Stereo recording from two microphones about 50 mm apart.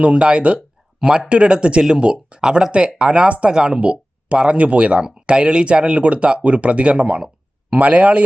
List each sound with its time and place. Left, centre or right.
0.0 s a man's voice: right